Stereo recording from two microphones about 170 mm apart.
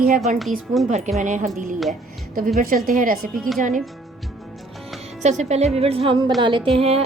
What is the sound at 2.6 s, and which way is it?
Speech, 55° right (ahead or behind).